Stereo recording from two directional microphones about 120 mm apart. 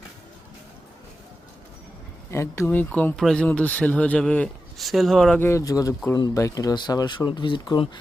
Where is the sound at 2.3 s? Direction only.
25° left (ahead or behind); by 5.3 s 5° left (ahead or behind).